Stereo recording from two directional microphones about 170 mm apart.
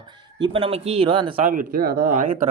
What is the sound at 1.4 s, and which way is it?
Speech, 55° right (ahead or behind).